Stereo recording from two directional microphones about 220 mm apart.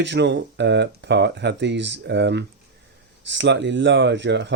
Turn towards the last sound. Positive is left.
turn(degrees=-55)  # may be behind; listen again after turning